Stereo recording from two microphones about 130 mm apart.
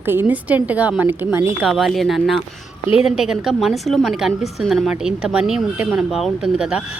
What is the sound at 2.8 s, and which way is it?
Speech, 45° left (ahead or behind).